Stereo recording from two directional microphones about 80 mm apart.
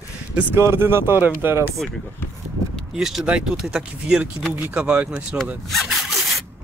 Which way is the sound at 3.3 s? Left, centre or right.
Centre.